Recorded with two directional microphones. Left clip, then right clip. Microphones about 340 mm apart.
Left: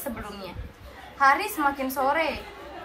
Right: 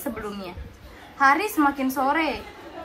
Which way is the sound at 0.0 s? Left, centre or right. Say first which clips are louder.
Right 3 dB; centre.